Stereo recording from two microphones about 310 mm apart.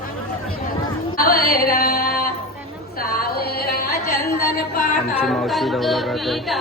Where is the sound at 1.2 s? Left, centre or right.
Left.